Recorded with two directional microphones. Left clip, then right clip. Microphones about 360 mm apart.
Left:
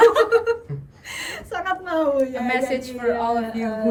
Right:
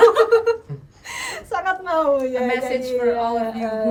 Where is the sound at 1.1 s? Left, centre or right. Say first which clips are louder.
Right 3 dB; centre.